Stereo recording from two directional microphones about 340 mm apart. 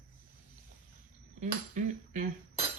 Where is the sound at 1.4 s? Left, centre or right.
Right.